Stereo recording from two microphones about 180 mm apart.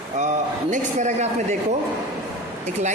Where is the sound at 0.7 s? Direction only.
40° right (ahead or behind).